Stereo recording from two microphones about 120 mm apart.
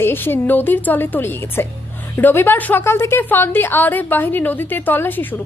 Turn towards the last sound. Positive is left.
turn(degrees=15)  # may be behind; listen again after turning